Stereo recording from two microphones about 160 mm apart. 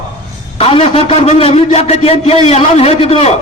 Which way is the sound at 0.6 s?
35° left (ahead or behind).